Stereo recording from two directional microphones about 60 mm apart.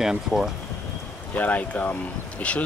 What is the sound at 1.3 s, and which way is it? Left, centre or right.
Speech, left.